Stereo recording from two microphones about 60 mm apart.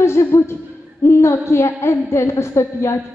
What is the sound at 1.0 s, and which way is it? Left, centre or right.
A woman's voice, left.